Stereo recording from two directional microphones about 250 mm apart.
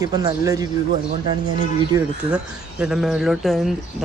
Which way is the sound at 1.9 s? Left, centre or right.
Centre.